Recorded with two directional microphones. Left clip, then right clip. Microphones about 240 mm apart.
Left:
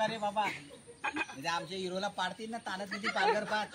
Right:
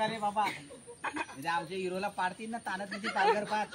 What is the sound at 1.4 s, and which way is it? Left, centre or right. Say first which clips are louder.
Speech: right 2 dB; left.